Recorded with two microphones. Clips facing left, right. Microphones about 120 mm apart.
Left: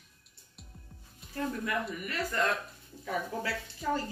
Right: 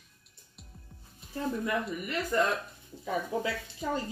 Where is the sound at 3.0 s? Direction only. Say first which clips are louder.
Right 3 dB; 20° right (ahead or behind).